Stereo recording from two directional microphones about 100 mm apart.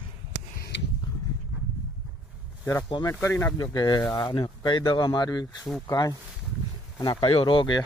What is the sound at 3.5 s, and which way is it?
Speech, 40° left (ahead or behind).